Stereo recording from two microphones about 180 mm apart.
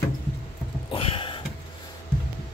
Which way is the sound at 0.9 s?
30° left (ahead or behind).